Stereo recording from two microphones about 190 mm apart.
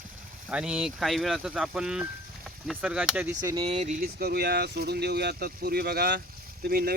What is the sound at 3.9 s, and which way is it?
Speech, 55° right (ahead or behind).